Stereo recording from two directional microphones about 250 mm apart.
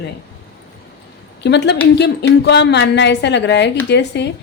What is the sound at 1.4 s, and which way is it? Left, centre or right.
A woman's voice, left.